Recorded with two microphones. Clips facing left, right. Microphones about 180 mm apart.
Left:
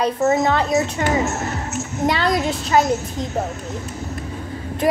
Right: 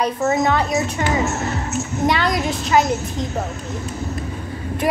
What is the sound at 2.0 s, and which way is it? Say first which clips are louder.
Speech: left 1 dB; 30° left (ahead or behind).